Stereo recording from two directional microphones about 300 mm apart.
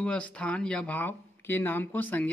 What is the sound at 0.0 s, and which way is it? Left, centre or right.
Speech, centre.